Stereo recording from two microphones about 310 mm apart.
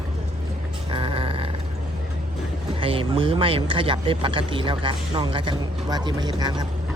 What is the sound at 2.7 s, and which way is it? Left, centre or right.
Speech, centre.